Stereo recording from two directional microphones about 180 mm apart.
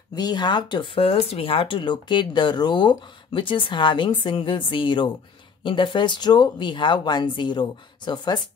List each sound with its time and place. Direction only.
0.1 s speech: 20° left (ahead or behind)